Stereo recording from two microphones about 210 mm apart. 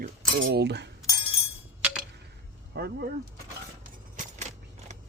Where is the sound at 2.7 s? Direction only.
45° right (ahead or behind).